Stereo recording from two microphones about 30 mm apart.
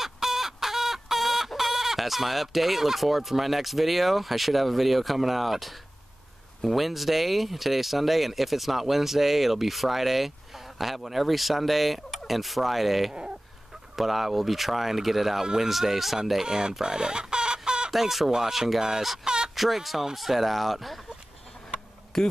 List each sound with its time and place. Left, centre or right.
0.0 s chicken: centre
6.6 s speech: centre
16.4 s speech: right
16.8 s chicken: right
17.9 s speech: centre
19.2 s a sound: right
19.5 s speech: centre
22.1 s speech: centre